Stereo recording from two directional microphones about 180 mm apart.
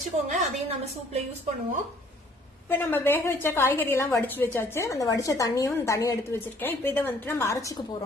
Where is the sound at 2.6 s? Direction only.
10° left (ahead or behind).